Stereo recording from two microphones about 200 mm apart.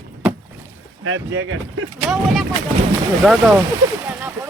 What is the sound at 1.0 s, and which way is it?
Speech, 90° right.